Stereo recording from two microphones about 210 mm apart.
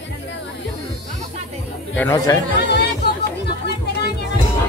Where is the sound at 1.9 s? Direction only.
15° left (ahead or behind).